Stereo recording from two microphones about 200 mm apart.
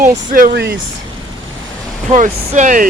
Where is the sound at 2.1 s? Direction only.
40° right (ahead or behind).